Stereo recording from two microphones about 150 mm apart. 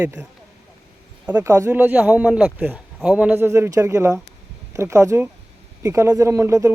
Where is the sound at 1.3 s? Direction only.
15° right (ahead or behind).